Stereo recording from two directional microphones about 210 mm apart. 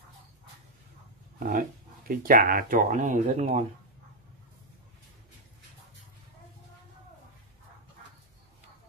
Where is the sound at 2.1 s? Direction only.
40° right (ahead or behind).